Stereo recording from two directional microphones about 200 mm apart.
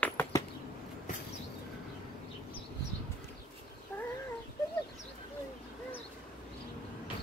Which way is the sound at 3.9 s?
10° left (ahead or behind).